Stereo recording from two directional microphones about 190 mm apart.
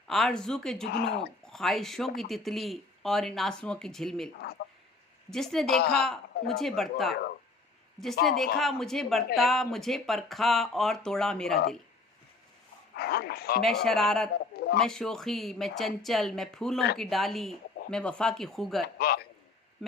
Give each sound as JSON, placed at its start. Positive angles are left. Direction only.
{"t": 0.1, "sound": "speech", "side_deg": 0}
{"t": 0.9, "sound": "speech", "side_deg": 60}
{"t": 1.5, "sound": "speech", "side_deg": 0}
{"t": 5.3, "sound": "speech", "side_deg": 0}
{"t": 5.7, "sound": "speech", "side_deg": 55}
{"t": 6.0, "sound": "speech", "side_deg": 0}
{"t": 13.0, "sound": "speech", "side_deg": 55}
{"t": 13.8, "sound": "speech", "side_deg": 0}
{"t": 18.9, "sound": "a man's voice", "side_deg": 55}